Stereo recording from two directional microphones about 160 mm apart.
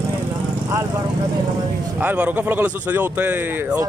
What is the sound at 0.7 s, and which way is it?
Vehicle, 20° right (ahead or behind).